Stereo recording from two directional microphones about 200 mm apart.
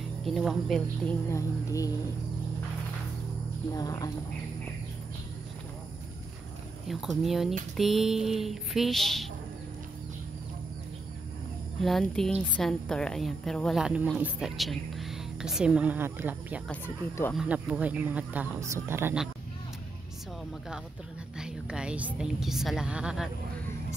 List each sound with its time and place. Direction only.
0.2 s a woman's voice: centre (ahead or behind)
1.3 s speech: 15° left (ahead or behind)
3.7 s speech: 20° left (ahead or behind)
6.9 s a woman's voice: centre (ahead or behind)
11.8 s a woman's voice: centre (ahead or behind)
16.6 s speech: 10° left (ahead or behind)
17.4 s speech: 5° right (ahead or behind)
21.4 s a woman's voice: 5° right (ahead or behind)